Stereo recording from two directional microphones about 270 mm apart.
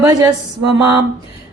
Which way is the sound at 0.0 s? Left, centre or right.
Centre.